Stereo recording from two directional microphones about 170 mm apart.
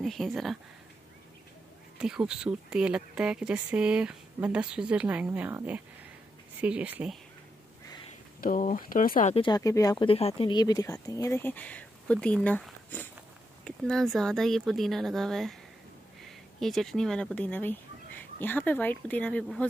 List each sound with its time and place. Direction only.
0.0 s speech: centre (ahead or behind)
2.0 s speech: 5° right (ahead or behind)
8.4 s speech: 55° left (ahead or behind)
9.3 s speech: 30° left (ahead or behind)
9.6 s speech: 20° left (ahead or behind)
10.0 s speech: 35° left (ahead or behind); by 19.6 s 10° left (ahead or behind)